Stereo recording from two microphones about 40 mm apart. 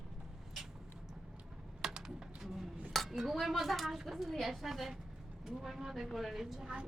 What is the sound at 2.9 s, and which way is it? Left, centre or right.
Dishes, centre.